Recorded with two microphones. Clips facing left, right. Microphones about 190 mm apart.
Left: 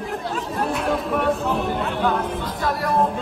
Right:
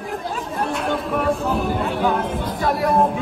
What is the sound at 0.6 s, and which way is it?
Speech, centre (ahead or behind).